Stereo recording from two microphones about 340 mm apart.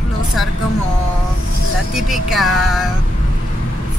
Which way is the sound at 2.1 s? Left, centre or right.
Centre.